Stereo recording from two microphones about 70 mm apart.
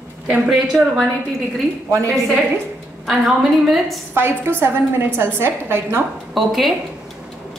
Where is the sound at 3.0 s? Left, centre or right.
Centre.